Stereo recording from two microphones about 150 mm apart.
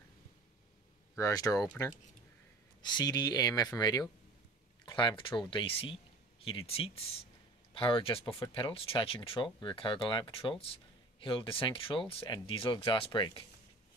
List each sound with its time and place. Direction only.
1.1 s speech: 20° left (ahead or behind)
2.8 s speech: 30° left (ahead or behind)